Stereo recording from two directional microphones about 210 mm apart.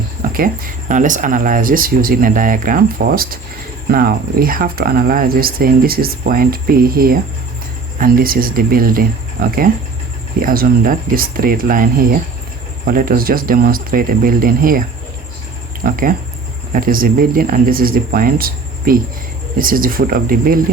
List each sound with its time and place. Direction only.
0.2 s speech: 40° right (ahead or behind)